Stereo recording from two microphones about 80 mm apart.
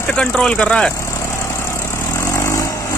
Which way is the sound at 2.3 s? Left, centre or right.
Left.